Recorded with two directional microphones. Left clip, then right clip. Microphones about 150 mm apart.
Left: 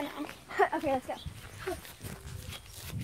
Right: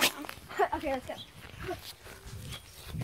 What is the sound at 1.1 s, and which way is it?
Speech, 35° right (ahead or behind).